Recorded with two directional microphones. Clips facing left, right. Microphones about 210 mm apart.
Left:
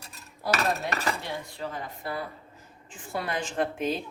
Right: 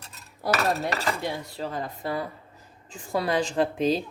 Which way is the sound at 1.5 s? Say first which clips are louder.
Right 4 dB; 35° right (ahead or behind).